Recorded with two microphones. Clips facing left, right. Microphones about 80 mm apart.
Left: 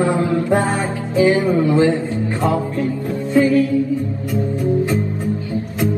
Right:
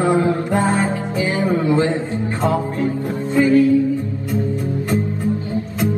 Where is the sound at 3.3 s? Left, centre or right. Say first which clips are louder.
Even; right.